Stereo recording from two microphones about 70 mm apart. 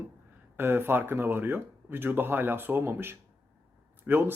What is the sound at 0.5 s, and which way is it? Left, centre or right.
Speech, right.